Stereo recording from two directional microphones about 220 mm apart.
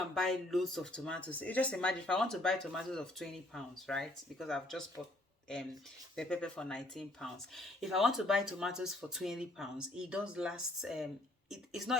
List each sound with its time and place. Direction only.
0.1 s speech: centre (ahead or behind)
6.1 s speech: 5° left (ahead or behind)